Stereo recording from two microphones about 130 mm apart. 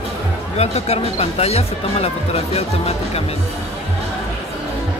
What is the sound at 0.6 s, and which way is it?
Speech, 55° left (ahead or behind).